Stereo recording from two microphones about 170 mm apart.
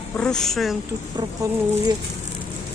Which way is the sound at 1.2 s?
25° right (ahead or behind).